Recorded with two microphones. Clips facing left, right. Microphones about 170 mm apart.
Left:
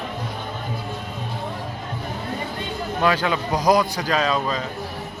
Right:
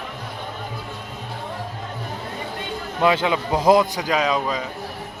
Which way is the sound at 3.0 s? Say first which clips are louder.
Right 2 dB; 20° right (ahead or behind).